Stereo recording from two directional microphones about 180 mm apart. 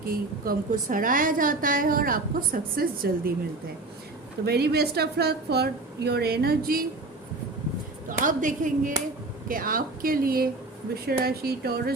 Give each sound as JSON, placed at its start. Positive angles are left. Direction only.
{"t": 0.0, "sound": "a woman's voice", "side_deg": -55}
{"t": 4.4, "sound": "a woman's voice", "side_deg": -60}
{"t": 8.2, "sound": "a woman's voice", "side_deg": -45}